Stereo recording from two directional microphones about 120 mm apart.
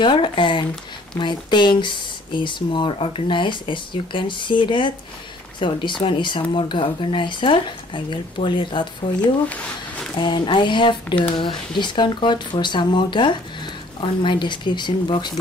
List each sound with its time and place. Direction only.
0.0 s speech: 40° left (ahead or behind)